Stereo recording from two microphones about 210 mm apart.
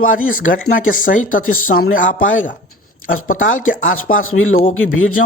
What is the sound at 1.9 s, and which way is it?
Speech, 40° left (ahead or behind).